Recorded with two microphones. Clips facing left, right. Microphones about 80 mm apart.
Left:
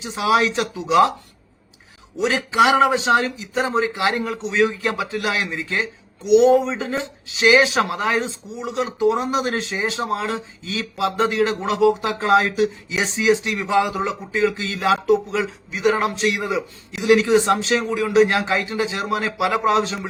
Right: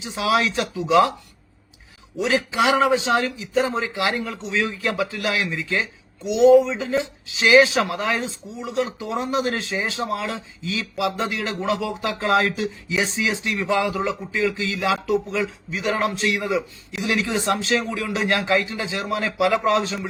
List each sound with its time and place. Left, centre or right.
0.0 s speech: left
2.1 s speech: left